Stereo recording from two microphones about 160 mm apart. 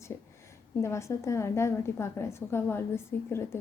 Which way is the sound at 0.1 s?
15° left (ahead or behind).